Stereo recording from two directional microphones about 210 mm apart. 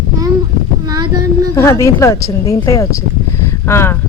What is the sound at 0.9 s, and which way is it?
Child singing, 20° right (ahead or behind).